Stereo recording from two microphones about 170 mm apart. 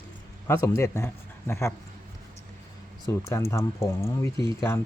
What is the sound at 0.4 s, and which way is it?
A man's voice, 15° left (ahead or behind).